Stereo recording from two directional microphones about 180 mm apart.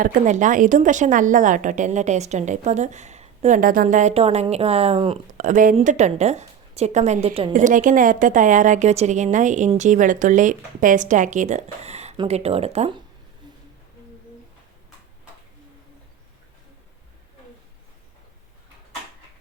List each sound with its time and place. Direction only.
0.0 s a woman's voice: 45° right (ahead or behind)
5.3 s a woman's voice: 45° right (ahead or behind)
7.5 s a woman's voice: 45° right (ahead or behind)